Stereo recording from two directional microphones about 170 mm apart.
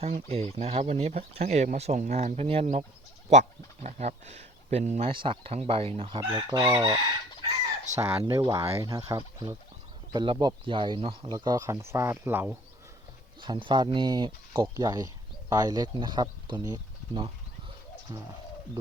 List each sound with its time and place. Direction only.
0.0 s speech: 35° right (ahead or behind)
3.8 s speech: 40° right (ahead or behind)
7.9 s speech: 45° right (ahead or behind)
8.2 s speech: 20° right (ahead or behind)
13.4 s speech: 30° right (ahead or behind)